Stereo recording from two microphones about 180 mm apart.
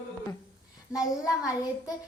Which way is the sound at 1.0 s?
20° left (ahead or behind).